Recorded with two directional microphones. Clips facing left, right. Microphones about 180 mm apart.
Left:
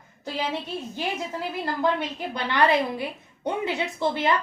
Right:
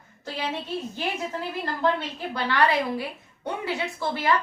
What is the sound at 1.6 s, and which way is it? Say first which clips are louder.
A woman's voice: left 1 dB; 15° left (ahead or behind).